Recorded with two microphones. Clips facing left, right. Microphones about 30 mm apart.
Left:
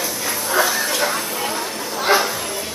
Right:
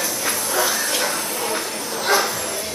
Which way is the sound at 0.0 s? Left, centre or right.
Centre.